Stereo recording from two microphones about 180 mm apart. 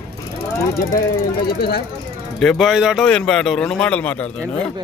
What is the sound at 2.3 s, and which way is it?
A man's voice, centre (ahead or behind).